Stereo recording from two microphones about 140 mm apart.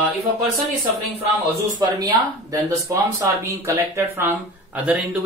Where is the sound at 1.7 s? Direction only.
25° right (ahead or behind).